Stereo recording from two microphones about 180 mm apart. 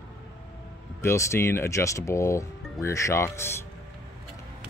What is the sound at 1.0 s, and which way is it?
Speech, 15° left (ahead or behind).